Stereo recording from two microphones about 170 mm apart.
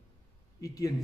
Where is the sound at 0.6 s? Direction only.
20° left (ahead or behind).